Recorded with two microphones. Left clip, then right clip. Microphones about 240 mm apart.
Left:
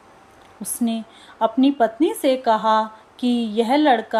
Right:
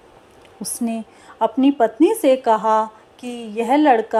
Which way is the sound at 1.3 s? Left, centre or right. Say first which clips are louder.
Right 1 dB; centre.